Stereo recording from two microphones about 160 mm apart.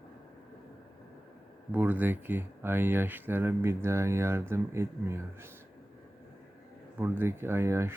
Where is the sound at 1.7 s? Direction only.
10° right (ahead or behind).